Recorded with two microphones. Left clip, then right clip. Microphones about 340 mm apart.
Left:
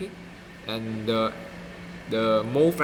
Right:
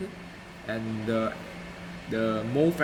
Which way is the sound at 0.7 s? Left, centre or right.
Centre.